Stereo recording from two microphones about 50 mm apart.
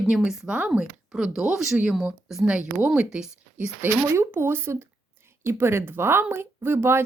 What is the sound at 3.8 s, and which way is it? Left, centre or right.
Speech, right.